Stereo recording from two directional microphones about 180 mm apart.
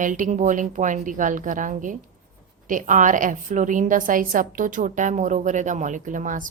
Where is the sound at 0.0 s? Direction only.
45° right (ahead or behind).